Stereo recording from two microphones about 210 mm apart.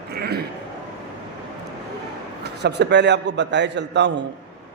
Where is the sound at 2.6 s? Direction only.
55° right (ahead or behind).